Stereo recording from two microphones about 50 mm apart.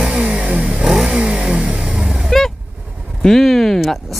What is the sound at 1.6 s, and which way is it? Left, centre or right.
Vehicle, right.